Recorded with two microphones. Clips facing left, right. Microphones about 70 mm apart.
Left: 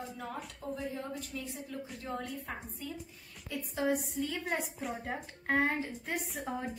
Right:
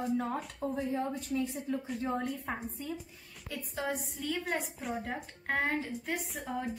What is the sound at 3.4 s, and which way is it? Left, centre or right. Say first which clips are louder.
A woman's voice: left 3 dB; centre.